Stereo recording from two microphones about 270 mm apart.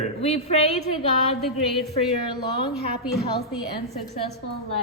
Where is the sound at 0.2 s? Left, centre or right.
Left.